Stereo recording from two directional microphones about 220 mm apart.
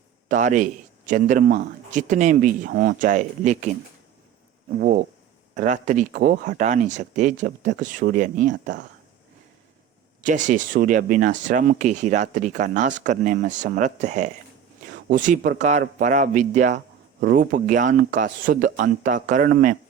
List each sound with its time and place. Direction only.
0.3 s speech: 35° right (ahead or behind)
4.8 s speech: 40° right (ahead or behind)
10.2 s speech: 35° right (ahead or behind)